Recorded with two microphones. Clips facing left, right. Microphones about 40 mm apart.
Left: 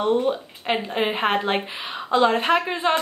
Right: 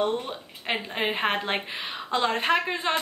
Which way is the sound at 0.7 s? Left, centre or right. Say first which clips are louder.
Left 5 dB; centre.